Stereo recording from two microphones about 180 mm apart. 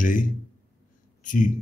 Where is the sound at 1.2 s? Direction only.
45° left (ahead or behind).